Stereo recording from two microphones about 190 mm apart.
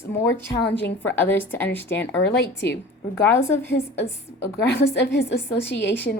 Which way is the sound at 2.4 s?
65° left (ahead or behind).